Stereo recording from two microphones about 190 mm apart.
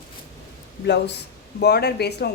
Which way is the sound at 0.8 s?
65° left (ahead or behind).